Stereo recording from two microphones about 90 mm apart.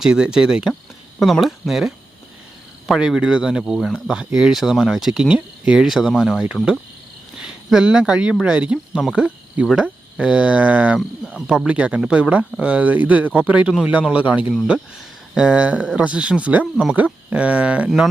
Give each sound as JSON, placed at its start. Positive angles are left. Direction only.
{"t": 0.0, "sound": "speech", "side_deg": -10}
{"t": 7.4, "sound": "speech", "side_deg": -10}
{"t": 17.8, "sound": "speech", "side_deg": -5}